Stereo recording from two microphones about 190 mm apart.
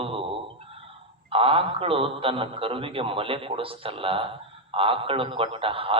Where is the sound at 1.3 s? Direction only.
30° right (ahead or behind).